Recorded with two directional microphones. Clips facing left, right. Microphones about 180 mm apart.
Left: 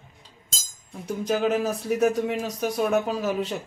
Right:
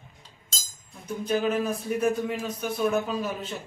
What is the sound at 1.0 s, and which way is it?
Speech, 80° left.